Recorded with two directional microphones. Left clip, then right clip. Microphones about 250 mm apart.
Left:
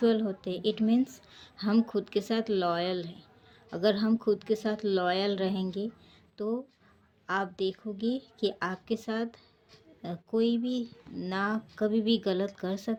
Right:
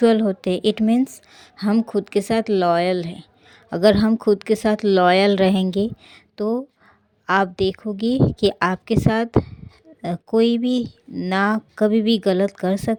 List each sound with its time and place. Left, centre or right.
0.0 s a woman's voice: right